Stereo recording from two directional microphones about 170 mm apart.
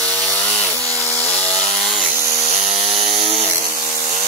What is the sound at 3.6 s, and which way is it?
Chainsaw, 55° right (ahead or behind).